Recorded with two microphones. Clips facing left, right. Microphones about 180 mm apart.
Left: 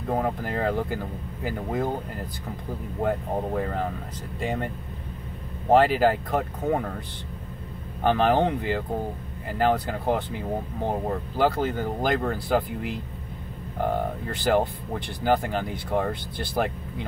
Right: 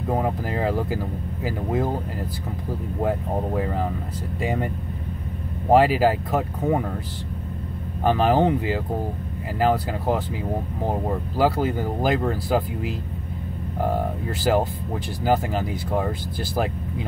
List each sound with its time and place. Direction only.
0.1 s speech: 5° right (ahead or behind)
3.0 s speech: 5° right (ahead or behind)
5.7 s speech: 5° right (ahead or behind)
8.0 s speech: 5° right (ahead or behind)
14.5 s speech: 5° right (ahead or behind)